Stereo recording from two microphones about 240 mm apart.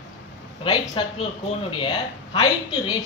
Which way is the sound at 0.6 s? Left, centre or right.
Centre.